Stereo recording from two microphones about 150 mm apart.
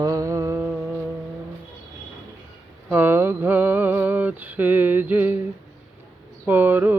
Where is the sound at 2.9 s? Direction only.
15° right (ahead or behind).